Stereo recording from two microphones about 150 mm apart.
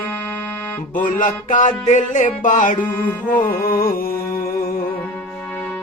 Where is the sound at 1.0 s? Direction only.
60° left (ahead or behind).